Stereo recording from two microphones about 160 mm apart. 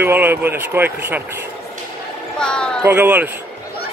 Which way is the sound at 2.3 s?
5° left (ahead or behind).